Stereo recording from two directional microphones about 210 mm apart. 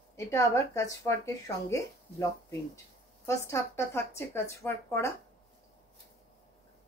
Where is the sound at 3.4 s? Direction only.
15° left (ahead or behind).